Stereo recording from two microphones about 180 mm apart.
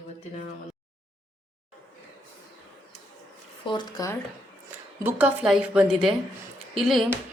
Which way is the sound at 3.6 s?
25° left (ahead or behind).